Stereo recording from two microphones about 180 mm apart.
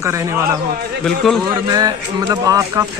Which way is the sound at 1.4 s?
20° right (ahead or behind).